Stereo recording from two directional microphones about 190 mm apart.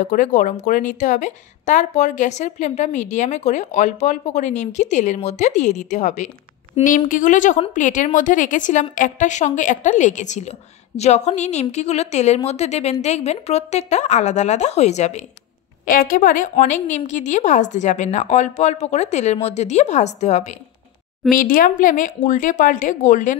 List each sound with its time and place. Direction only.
0.1 s a woman's voice: 45° left (ahead or behind)
7.1 s a woman's voice: 45° left (ahead or behind)
15.8 s a woman's voice: 45° left (ahead or behind)
21.4 s a woman's voice: 45° left (ahead or behind)